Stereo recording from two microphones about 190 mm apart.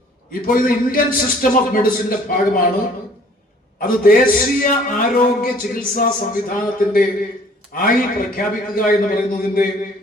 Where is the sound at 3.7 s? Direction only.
50° left (ahead or behind).